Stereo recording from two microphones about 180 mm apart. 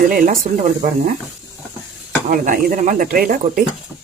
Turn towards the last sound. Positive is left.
turn(degrees=-55)  # may be behind; listen again after turning